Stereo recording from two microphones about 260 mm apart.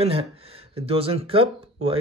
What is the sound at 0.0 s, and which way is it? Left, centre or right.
Speech, right.